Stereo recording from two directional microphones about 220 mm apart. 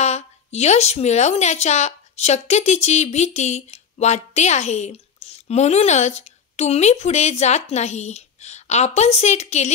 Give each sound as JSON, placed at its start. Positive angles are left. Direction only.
{"t": 0.0, "sound": "a woman's voice", "side_deg": 30}